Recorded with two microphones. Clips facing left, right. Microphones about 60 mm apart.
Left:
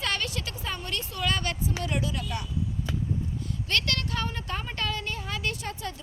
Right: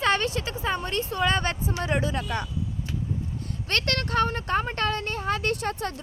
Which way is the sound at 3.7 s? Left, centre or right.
Right.